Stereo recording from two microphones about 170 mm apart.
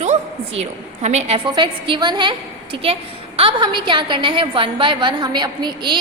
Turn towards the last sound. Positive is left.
turn(degrees=-25)  # may be behind; listen again after turning